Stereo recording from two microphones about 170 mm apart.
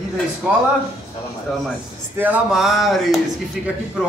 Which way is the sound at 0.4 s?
10° right (ahead or behind).